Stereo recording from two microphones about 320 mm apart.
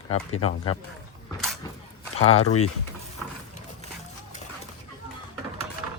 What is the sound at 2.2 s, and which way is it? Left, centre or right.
Speech, left.